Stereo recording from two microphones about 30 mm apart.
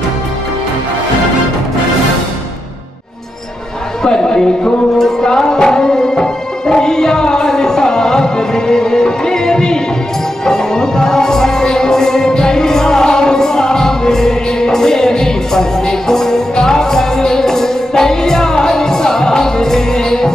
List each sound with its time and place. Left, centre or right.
4.0 s music: left